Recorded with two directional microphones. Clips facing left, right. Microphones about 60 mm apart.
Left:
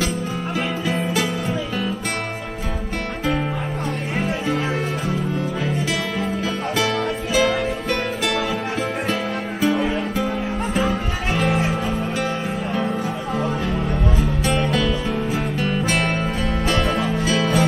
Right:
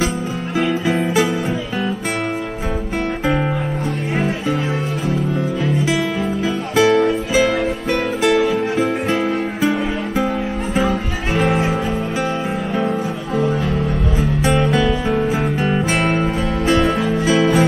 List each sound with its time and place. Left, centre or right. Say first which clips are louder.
0.8 s music: right 4 dB; centre
6.7 s music: right 10 dB; centre
10.1 s music: right 3 dB; right
14.5 s music: right 4 dB; centre
17.0 s music: right 5 dB; centre